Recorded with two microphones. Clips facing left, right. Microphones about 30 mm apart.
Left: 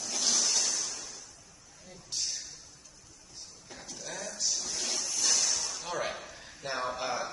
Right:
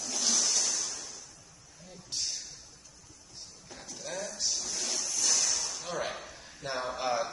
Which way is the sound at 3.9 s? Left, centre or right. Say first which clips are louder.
Right 2 dB; centre.